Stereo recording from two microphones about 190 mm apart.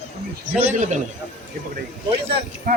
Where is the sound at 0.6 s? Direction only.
40° right (ahead or behind).